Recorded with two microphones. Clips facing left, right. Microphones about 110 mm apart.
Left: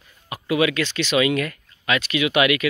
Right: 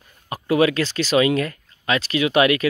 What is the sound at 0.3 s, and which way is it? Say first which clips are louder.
Speech: right 3 dB; 35° right (ahead or behind).